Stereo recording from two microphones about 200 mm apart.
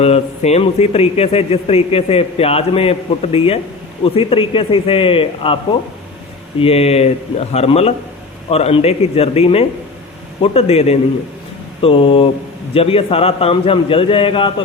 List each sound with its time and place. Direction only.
0.0 s a man's voice: 30° left (ahead or behind)
6.6 s a man's voice: 30° left (ahead or behind)